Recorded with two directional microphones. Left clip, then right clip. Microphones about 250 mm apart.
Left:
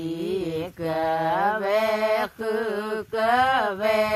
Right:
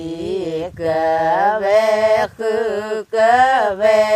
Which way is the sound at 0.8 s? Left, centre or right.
Right.